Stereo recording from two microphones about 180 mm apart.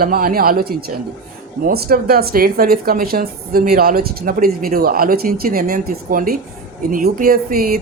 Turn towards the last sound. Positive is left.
turn(degrees=-55)  # may be behind; listen again after turning